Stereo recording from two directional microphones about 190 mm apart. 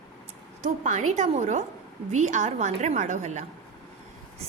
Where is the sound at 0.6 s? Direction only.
40° right (ahead or behind).